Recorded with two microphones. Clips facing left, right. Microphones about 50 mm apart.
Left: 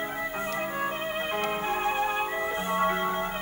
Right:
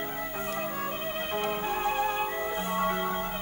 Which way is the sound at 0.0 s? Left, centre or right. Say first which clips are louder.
Left 3 dB; centre.